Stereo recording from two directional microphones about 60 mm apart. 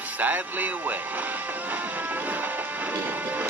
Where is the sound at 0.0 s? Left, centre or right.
Right.